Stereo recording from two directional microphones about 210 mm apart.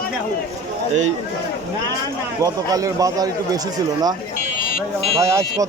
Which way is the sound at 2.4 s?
15° right (ahead or behind).